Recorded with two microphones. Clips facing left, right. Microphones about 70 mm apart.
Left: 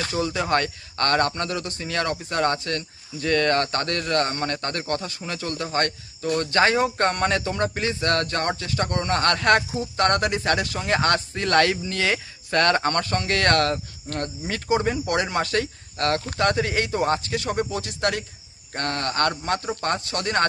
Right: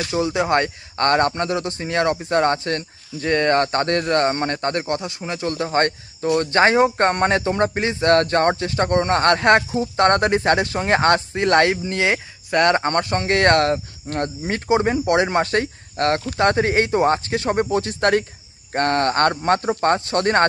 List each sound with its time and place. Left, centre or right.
0.1 s speech: right